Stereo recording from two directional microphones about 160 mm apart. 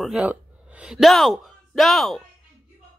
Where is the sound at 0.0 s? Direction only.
5° right (ahead or behind).